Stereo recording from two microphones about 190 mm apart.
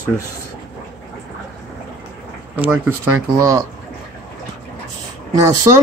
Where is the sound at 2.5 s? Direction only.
10° right (ahead or behind).